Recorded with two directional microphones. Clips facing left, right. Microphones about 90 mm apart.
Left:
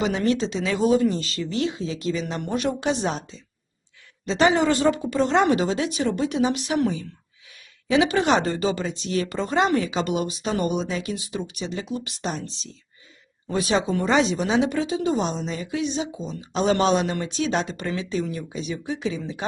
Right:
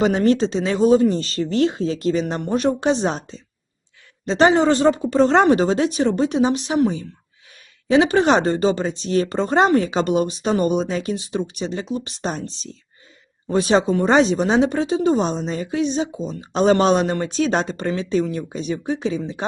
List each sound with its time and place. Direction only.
0.0 s speech: 40° right (ahead or behind)